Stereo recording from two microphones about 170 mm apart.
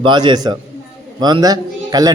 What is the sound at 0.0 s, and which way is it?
A man's voice, 25° right (ahead or behind).